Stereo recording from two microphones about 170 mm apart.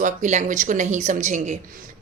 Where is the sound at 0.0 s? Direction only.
45° right (ahead or behind).